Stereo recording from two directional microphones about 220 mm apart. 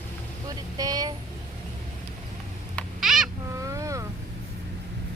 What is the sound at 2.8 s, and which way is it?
Owl, centre (ahead or behind).